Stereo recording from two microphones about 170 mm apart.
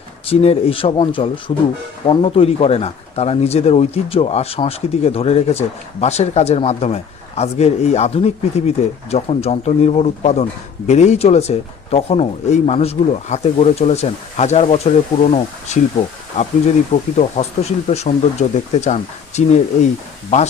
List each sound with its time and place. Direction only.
0.3 s speech: 35° left (ahead or behind)